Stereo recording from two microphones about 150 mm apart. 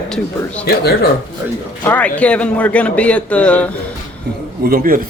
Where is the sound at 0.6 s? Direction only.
90° left.